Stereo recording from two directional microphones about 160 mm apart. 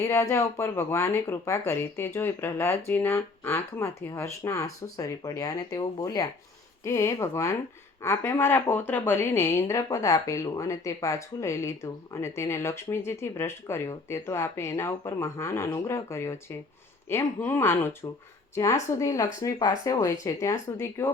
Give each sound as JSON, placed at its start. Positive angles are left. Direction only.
{"t": 0.0, "sound": "a woman's voice", "side_deg": 20}